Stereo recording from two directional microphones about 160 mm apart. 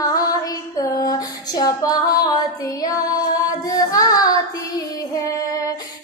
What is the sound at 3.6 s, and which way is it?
Child singing, 20° left (ahead or behind).